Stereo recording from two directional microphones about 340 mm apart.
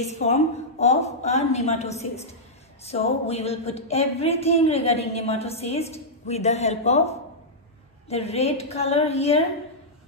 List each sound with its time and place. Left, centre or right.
0.0 s a woman's voice: centre